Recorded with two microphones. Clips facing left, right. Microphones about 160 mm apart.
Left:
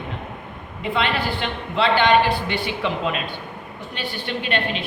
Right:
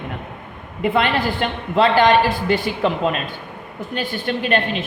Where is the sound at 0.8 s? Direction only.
50° right (ahead or behind).